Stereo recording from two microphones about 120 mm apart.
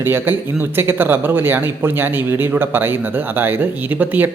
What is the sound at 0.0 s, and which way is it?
Speech, 20° right (ahead or behind).